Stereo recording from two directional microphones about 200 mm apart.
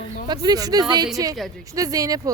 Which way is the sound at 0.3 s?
20° right (ahead or behind).